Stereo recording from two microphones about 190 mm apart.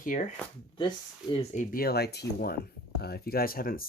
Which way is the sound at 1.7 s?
55° left (ahead or behind).